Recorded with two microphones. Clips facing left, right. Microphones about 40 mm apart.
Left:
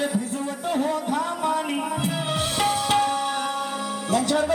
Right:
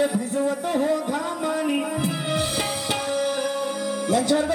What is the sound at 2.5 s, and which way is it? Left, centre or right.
Tabla, left.